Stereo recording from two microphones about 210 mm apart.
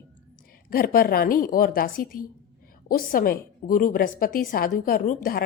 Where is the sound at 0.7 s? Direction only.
45° left (ahead or behind).